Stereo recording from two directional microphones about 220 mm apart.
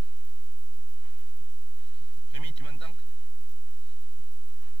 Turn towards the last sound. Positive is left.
turn(degrees=-20)  # may be behind; listen again after turning